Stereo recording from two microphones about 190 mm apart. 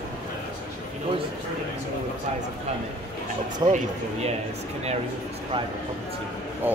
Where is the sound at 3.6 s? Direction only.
25° right (ahead or behind).